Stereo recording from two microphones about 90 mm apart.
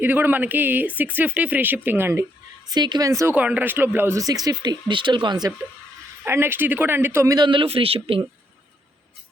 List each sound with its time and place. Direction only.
0.0 s speech: 20° right (ahead or behind)
2.7 s speech: 55° right (ahead or behind)
3.1 s speech: 35° right (ahead or behind)
3.3 s speech: 15° right (ahead or behind)
4.1 s speech: 45° right (ahead or behind)
6.2 s speech: 25° right (ahead or behind)
7.3 s speech: 55° right (ahead or behind); by 8.2 s 90° right